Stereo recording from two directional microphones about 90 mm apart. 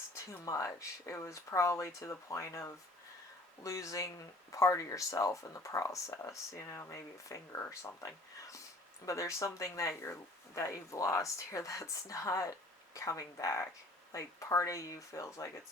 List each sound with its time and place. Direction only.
0.3 s speech: 35° left (ahead or behind)